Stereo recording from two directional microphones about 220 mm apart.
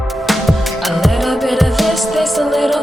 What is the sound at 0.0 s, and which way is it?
Music, centre (ahead or behind).